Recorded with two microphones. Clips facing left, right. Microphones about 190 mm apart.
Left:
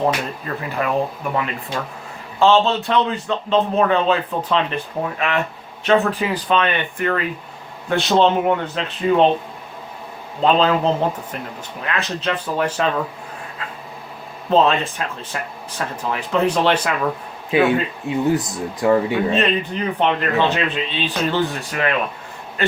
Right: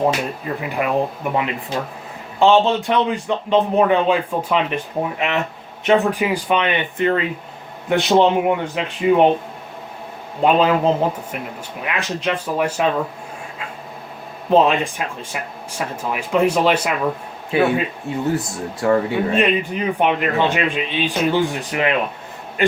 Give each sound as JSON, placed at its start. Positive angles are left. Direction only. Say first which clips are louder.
{"t": 0.0, "sound": "a man's voice", "louder": "right 1 dB", "side_deg": -15}
{"t": 10.4, "sound": "a man's voice", "louder": "right 1 dB", "side_deg": -10}
{"t": 14.5, "sound": "a man's voice", "louder": "right 1 dB", "side_deg": -15}
{"t": 18.1, "sound": "speech", "louder": "left 3 dB", "side_deg": 15}
{"t": 19.3, "sound": "a man's voice", "louder": "right 1 dB", "side_deg": -10}